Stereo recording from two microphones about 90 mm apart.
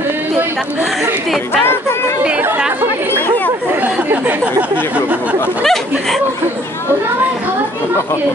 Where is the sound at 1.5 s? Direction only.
25° left (ahead or behind).